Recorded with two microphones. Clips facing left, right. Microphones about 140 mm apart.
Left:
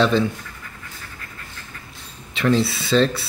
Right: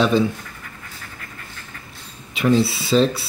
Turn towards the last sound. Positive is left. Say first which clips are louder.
# right 1 dB
turn(degrees=0)  # may be behind; listen again after turning